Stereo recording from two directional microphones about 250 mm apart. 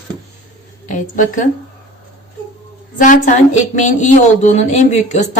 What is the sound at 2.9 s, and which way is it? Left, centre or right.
A woman's voice, left.